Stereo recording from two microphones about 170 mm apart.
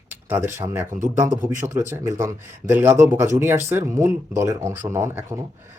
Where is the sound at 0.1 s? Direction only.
15° right (ahead or behind).